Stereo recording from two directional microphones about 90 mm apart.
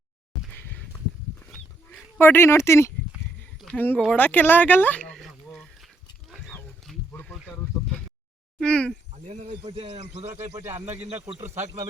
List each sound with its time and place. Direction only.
0.5 s a sound: 20° left (ahead or behind)
2.1 s speech: 25° left (ahead or behind)
3.7 s speech: 20° left (ahead or behind)
5.1 s a sound: centre (ahead or behind)
6.9 s wild animals: centre (ahead or behind)
7.3 s a sound: 10° left (ahead or behind)
8.6 s speech: 10° left (ahead or behind)
9.6 s a man's voice: 85° right
10.2 s speech: 30° right (ahead or behind)